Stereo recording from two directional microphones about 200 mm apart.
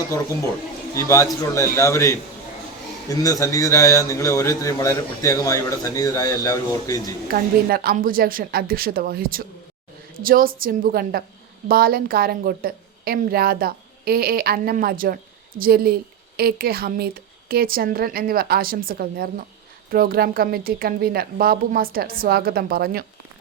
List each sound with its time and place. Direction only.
0.9 s a man's voice: 15° left (ahead or behind)
7.3 s a woman's voice: 50° right (ahead or behind)